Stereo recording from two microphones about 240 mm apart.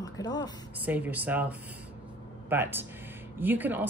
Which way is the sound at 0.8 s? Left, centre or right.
Centre.